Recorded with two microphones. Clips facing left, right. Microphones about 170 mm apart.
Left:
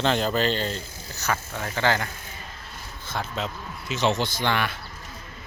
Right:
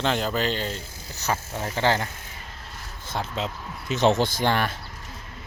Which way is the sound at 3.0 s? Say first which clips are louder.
Right 1 dB; 35° right (ahead or behind).